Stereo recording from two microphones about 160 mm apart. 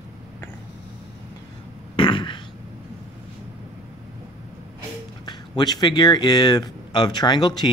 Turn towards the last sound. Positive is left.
turn(degrees=25)  # may be behind; listen again after turning